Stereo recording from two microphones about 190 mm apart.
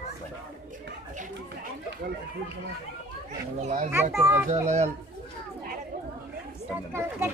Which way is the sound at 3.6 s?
35° right (ahead or behind).